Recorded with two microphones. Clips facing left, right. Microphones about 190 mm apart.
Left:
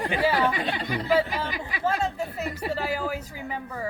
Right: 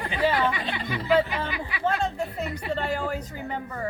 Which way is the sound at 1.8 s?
5° left (ahead or behind).